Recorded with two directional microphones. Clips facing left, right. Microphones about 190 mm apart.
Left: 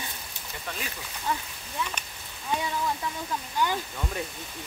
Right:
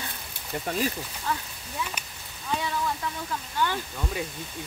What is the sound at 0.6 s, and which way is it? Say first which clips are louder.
Speech: right 9 dB; 35° right (ahead or behind).